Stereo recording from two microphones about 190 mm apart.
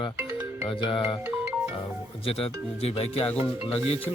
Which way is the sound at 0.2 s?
10° right (ahead or behind).